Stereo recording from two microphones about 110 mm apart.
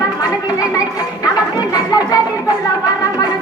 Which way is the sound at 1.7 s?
35° left (ahead or behind).